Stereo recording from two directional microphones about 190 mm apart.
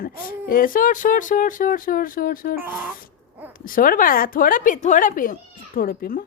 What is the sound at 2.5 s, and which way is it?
Speech, 10° right (ahead or behind).